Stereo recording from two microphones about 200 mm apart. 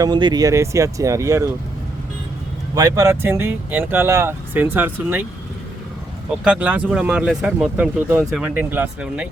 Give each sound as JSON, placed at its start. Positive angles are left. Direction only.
{"t": 0.0, "sound": "speech", "side_deg": -20}
{"t": 2.7, "sound": "speech", "side_deg": -15}
{"t": 6.4, "sound": "speech", "side_deg": -5}